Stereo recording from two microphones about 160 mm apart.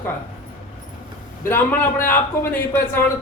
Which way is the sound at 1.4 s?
15° left (ahead or behind).